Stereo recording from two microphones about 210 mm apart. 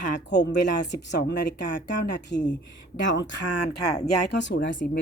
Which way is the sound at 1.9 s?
55° left (ahead or behind).